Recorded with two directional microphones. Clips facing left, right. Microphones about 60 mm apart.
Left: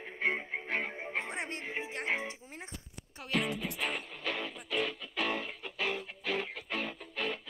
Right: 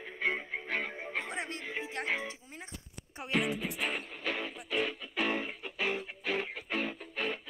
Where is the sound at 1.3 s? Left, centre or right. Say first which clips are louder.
Even; left.